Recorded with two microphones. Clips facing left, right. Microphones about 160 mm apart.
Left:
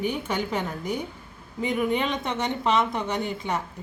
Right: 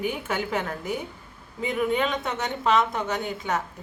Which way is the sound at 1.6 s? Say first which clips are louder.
Even; 5° right (ahead or behind).